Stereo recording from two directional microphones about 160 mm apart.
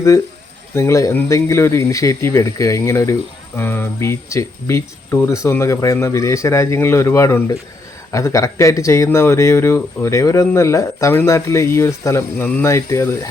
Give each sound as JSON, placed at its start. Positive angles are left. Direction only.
{"t": 0.7, "sound": "speech", "side_deg": 20}